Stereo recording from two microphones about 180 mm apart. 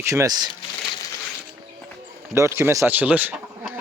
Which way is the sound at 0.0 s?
15° right (ahead or behind).